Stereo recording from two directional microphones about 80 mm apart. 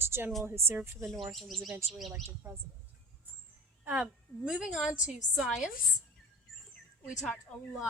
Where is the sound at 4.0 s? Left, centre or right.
Centre.